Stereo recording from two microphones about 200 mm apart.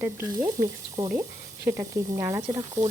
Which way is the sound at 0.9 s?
20° right (ahead or behind).